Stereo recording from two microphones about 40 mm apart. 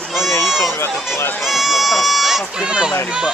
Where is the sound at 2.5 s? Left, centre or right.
Centre.